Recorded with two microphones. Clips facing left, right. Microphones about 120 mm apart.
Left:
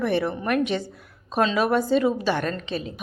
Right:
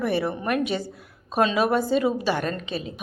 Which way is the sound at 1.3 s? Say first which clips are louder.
Even; 15° right (ahead or behind).